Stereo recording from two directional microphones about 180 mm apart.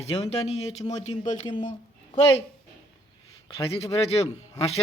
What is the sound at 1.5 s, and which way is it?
Speech, 25° left (ahead or behind).